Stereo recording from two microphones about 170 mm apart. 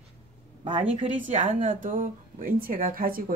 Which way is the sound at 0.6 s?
35° right (ahead or behind).